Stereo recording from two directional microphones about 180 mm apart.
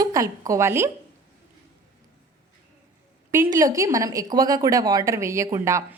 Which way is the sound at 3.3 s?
15° right (ahead or behind).